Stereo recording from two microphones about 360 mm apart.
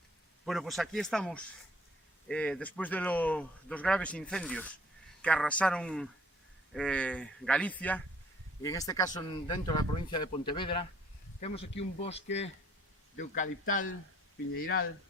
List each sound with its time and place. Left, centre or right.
0.4 s speech: centre; by 14.8 s left